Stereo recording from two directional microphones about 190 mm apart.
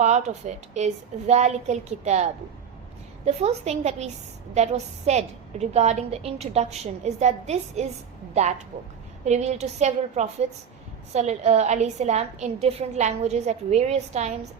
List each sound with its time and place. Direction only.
0.0 s a woman's voice: 40° right (ahead or behind)